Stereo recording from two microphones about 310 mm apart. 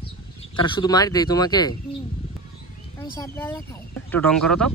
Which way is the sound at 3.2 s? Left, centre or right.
Centre.